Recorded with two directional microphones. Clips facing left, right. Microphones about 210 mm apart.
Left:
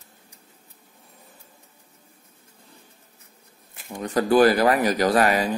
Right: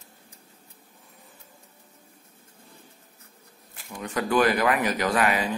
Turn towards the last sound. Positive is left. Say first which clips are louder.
# left 4 dB
turn(degrees=40)  # may be behind; listen again after turning